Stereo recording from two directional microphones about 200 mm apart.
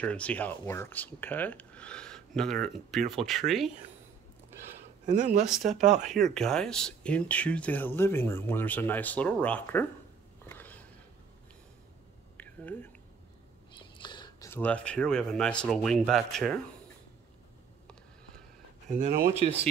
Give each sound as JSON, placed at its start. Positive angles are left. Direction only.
{"t": 0.0, "sound": "speech", "side_deg": 5}
{"t": 5.0, "sound": "speech", "side_deg": -40}
{"t": 5.4, "sound": "speech", "side_deg": 0}
{"t": 10.4, "sound": "a sound", "side_deg": 10}
{"t": 12.4, "sound": "a sound", "side_deg": 10}
{"t": 13.7, "sound": "speech", "side_deg": 20}
{"t": 18.9, "sound": "speech", "side_deg": -40}